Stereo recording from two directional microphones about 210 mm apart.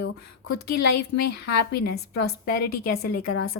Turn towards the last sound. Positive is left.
turn(degrees=85)